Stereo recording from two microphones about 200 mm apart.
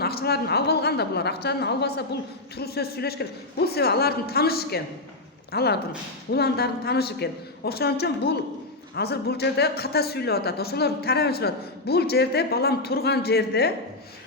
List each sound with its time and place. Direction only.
0.0 s speech: 50° left (ahead or behind)